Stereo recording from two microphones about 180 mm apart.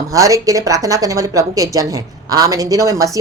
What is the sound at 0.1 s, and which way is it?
A woman's voice, 20° right (ahead or behind).